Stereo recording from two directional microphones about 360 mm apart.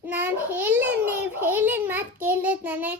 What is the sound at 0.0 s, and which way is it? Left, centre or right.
A child's voice, centre.